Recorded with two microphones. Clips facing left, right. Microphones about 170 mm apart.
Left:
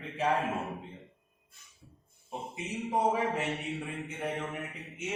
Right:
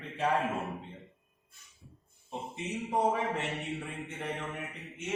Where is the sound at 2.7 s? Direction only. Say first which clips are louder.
Even; centre (ahead or behind).